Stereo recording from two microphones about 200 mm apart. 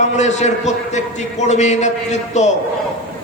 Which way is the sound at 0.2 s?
35° left (ahead or behind).